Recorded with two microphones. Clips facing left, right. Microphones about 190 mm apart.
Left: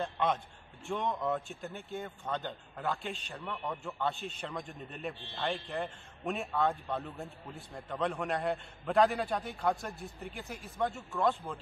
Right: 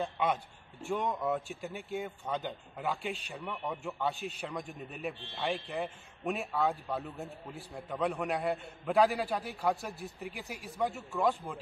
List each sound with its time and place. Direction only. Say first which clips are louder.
0.0 s a man's voice: even; 5° right (ahead or behind)
1.8 s speech: right 3 dB; 15° right (ahead or behind)
2.8 s a man's voice: right 1 dB; 5° right (ahead or behind)
3.3 s a man's voice: right 1 dB; 15° right (ahead or behind)